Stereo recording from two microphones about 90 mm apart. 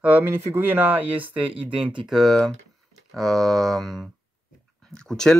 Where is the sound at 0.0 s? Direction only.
20° right (ahead or behind).